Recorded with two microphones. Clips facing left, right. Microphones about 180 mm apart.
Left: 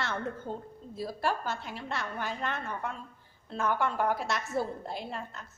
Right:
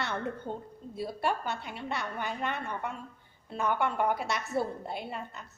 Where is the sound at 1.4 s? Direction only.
65° right (ahead or behind).